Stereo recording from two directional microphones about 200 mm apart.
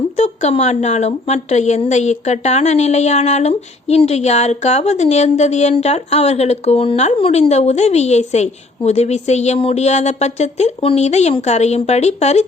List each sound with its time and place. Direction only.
0.2 s a woman's voice: 35° left (ahead or behind)